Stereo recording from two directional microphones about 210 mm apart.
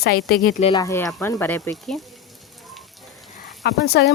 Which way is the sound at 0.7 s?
15° left (ahead or behind).